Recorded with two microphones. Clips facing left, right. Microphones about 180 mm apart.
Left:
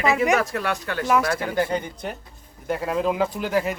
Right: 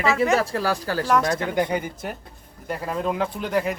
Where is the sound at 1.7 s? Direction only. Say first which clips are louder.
Even; 10° right (ahead or behind).